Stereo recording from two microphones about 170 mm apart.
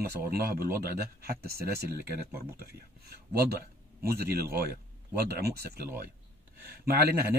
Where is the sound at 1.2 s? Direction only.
65° right (ahead or behind).